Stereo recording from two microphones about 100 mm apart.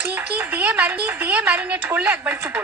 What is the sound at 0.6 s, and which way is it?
Speech, 15° right (ahead or behind).